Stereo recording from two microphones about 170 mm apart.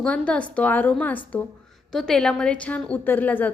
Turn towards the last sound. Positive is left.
turn(degrees=10)  # may be behind; listen again after turning